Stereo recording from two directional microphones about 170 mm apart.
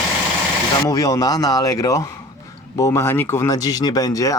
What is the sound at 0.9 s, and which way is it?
Speech, 20° left (ahead or behind).